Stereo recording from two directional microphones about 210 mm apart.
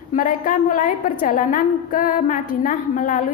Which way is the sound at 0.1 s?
40° left (ahead or behind).